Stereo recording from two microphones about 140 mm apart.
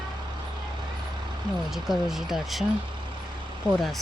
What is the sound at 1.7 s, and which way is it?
Speech, 5° right (ahead or behind).